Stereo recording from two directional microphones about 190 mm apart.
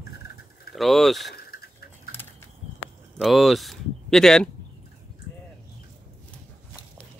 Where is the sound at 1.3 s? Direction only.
55° left (ahead or behind).